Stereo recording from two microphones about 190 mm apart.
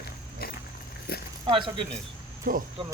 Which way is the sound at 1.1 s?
55° left (ahead or behind).